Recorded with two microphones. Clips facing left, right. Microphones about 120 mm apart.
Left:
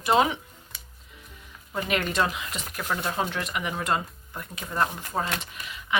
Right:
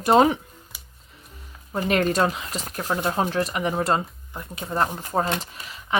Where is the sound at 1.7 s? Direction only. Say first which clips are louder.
Right 5 dB; 40° right (ahead or behind).